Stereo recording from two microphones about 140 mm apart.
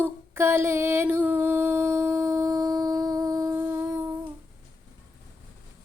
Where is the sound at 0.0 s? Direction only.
15° right (ahead or behind).